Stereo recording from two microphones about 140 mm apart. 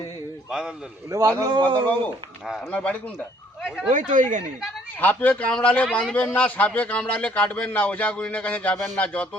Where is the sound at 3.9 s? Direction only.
60° right (ahead or behind).